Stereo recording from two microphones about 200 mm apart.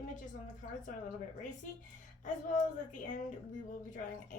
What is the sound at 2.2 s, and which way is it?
Speech, 40° left (ahead or behind).